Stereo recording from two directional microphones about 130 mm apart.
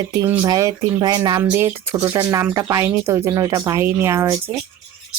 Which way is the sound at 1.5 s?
20° right (ahead or behind).